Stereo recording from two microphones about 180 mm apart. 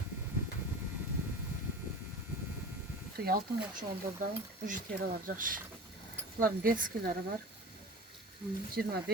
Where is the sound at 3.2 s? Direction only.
55° right (ahead or behind).